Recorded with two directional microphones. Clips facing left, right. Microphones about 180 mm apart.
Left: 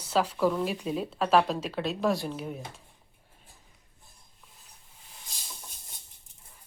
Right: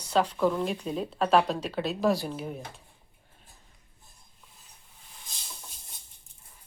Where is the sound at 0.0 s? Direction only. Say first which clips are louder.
Right 1 dB; 5° left (ahead or behind).